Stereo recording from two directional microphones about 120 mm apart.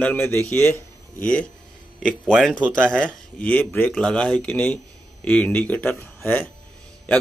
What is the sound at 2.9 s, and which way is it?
A man's voice, 10° left (ahead or behind).